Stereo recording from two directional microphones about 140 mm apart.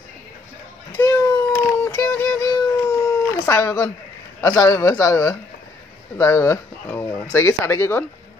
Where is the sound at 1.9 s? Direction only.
20° left (ahead or behind).